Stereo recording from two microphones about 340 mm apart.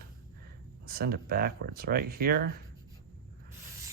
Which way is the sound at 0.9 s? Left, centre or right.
Right.